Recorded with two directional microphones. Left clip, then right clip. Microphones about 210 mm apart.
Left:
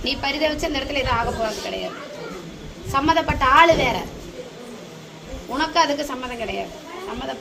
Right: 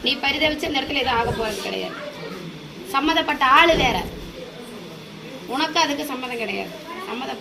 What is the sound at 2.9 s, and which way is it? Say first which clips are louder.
A woman's voice: left 1 dB; 20° left (ahead or behind).